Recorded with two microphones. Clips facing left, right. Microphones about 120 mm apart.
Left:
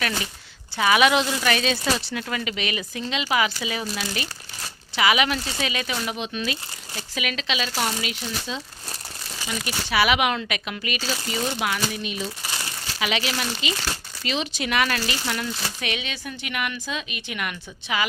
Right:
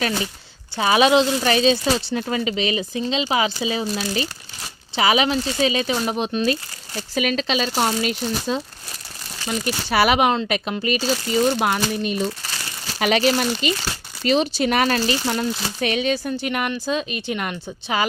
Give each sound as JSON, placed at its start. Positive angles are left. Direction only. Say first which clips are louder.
{"t": 0.8, "sound": "speech", "louder": "right 3 dB", "side_deg": -30}